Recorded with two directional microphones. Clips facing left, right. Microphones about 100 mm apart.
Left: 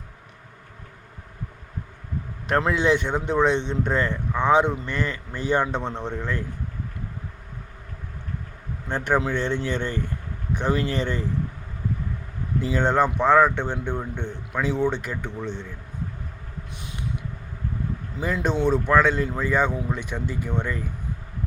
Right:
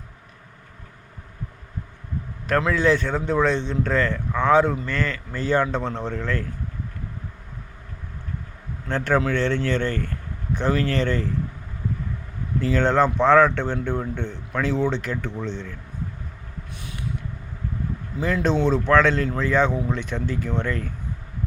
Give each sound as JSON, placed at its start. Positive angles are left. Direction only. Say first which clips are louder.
{"t": 2.5, "sound": "a man's voice", "louder": "right 1 dB", "side_deg": 25}
{"t": 8.9, "sound": "speech", "louder": "right 2 dB", "side_deg": 15}
{"t": 12.5, "sound": "speech", "louder": "right 2 dB", "side_deg": 15}
{"t": 18.2, "sound": "speech", "louder": "right 2 dB", "side_deg": 15}